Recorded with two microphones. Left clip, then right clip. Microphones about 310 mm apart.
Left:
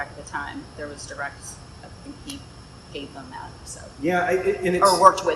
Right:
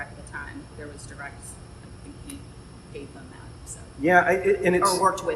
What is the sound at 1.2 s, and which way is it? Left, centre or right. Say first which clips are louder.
Speech: left 7 dB; centre.